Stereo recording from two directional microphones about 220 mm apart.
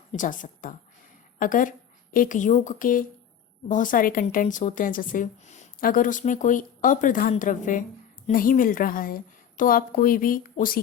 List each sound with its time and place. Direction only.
0.1 s speech: 35° left (ahead or behind)